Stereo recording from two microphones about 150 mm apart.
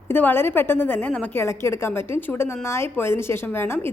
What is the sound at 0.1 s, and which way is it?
A woman's voice, 10° left (ahead or behind).